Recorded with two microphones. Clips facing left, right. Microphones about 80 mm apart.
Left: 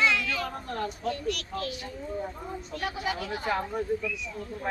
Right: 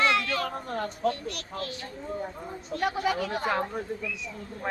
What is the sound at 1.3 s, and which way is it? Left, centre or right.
Speech, right.